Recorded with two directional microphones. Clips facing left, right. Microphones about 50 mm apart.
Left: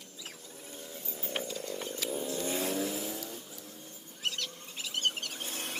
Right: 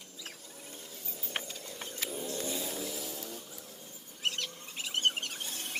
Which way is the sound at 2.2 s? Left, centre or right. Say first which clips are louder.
Left 2 dB; left.